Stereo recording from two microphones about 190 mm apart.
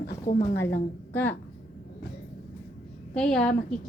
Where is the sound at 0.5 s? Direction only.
10° left (ahead or behind).